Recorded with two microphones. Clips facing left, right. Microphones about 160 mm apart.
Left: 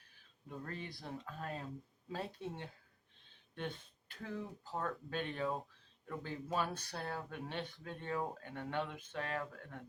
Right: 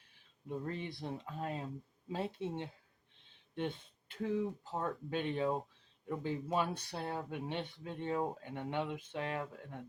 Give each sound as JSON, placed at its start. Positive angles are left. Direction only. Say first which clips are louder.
{"t": 0.4, "sound": "speech", "louder": "right 6 dB", "side_deg": -20}